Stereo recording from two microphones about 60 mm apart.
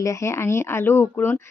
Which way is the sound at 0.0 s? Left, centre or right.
Left.